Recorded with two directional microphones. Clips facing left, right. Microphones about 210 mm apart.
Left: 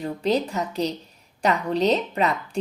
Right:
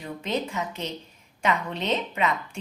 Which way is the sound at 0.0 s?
35° left (ahead or behind).